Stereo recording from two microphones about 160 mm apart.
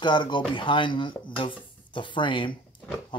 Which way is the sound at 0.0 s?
30° left (ahead or behind).